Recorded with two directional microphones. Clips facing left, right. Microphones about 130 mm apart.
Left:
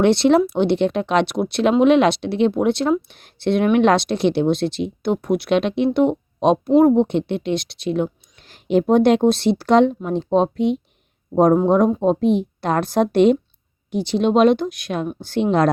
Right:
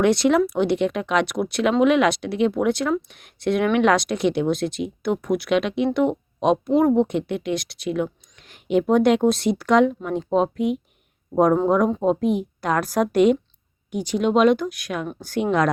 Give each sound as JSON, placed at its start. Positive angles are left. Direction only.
{"t": 0.0, "sound": "speech", "side_deg": 30}
{"t": 12.0, "sound": "speech", "side_deg": 25}